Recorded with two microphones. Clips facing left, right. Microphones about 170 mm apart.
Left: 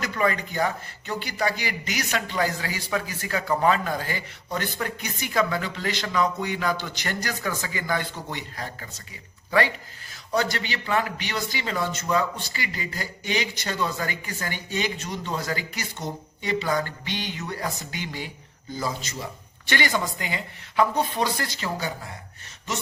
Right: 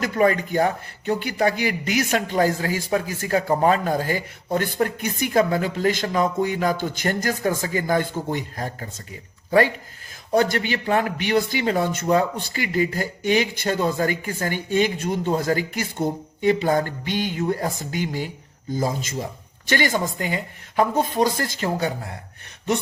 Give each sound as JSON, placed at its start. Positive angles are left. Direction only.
{"t": 0.0, "sound": "a man's voice", "side_deg": -45}